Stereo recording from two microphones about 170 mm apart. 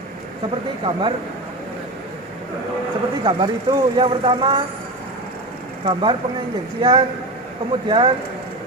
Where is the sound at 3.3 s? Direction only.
25° right (ahead or behind).